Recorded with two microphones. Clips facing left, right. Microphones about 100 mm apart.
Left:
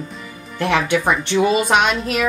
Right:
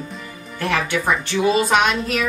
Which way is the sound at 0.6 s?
5° left (ahead or behind).